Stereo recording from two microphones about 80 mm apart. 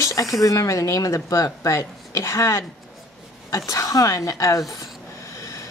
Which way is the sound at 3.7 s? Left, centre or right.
Left.